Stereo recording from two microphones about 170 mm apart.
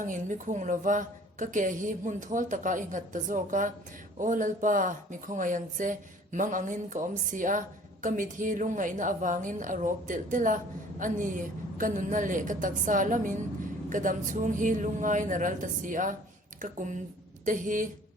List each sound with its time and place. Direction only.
0.0 s a woman's voice: 50° right (ahead or behind)